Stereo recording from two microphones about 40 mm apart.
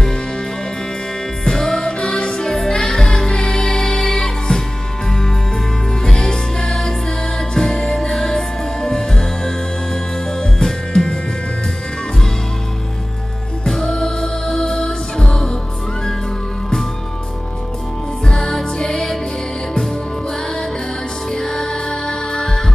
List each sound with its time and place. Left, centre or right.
1.4 s music: centre
6.0 s music: centre
13.7 s music: centre
18.2 s music: centre
21.3 s music: centre